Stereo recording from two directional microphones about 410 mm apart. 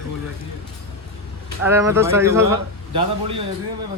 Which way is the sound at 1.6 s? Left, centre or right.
Centre.